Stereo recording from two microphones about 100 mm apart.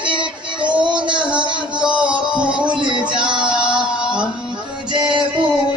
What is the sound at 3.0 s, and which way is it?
Music, 55° right (ahead or behind).